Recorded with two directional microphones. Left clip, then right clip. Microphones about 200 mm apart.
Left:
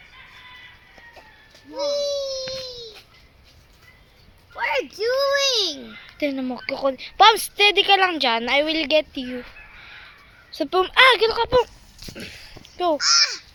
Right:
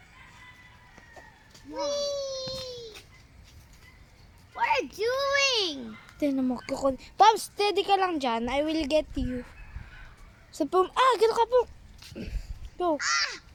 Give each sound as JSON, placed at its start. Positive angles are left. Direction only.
{"t": 1.7, "sound": "babbling", "side_deg": -10}
{"t": 2.2, "sound": "crying", "side_deg": -10}
{"t": 4.5, "sound": "a sound", "side_deg": -30}
{"t": 5.0, "sound": "a sound", "side_deg": -20}
{"t": 6.1, "sound": "a woman's voice", "side_deg": -10}
{"t": 10.5, "sound": "a woman's voice", "side_deg": -10}
{"t": 11.2, "sound": "speech", "side_deg": -20}
{"t": 12.1, "sound": "a sound", "side_deg": -5}
{"t": 13.0, "sound": "a child's voice", "side_deg": -35}